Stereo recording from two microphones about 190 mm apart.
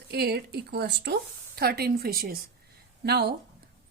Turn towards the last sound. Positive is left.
turn(degrees=-55)  # may be behind; listen again after turning